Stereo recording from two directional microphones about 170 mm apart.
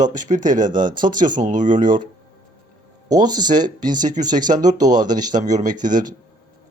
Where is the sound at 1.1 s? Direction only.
50° right (ahead or behind).